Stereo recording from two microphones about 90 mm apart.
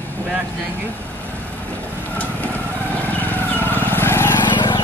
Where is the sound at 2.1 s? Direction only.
20° left (ahead or behind).